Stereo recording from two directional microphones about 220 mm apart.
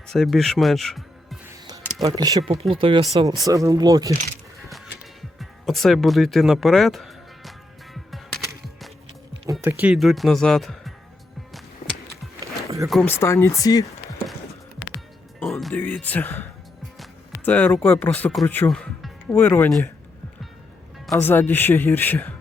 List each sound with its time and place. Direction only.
0.1 s speech: centre (ahead or behind)
1.5 s music: 15° right (ahead or behind)
2.0 s speech: 15° right (ahead or behind)
4.1 s speech: 40° right (ahead or behind)
5.4 s speech: centre (ahead or behind)
8.1 s music: centre (ahead or behind)
9.5 s speech: 10° right (ahead or behind)
12.9 s speech: 5° left (ahead or behind)
15.4 s music: centre (ahead or behind)
17.0 s speech: 5° left (ahead or behind)
21.1 s speech: 10° left (ahead or behind)